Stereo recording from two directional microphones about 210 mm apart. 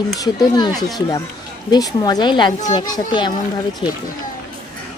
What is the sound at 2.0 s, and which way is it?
Speech, 20° left (ahead or behind).